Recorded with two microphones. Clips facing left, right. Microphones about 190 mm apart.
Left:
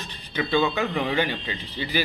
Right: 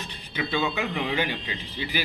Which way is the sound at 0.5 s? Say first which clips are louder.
Left 5 dB; 40° left (ahead or behind).